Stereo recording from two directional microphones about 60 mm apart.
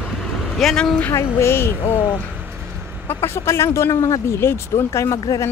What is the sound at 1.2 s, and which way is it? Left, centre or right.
Speech, left.